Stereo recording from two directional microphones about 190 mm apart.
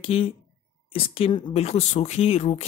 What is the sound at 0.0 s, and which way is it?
Speech, 30° left (ahead or behind).